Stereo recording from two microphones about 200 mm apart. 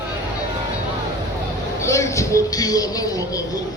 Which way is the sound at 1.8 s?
15° left (ahead or behind).